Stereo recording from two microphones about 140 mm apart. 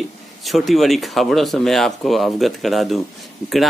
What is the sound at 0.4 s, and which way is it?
Speech, centre (ahead or behind).